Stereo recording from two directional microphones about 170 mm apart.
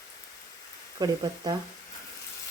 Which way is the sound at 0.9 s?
25° right (ahead or behind).